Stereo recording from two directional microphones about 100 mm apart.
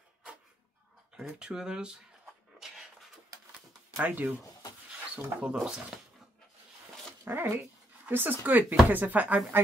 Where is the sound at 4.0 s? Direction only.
15° right (ahead or behind).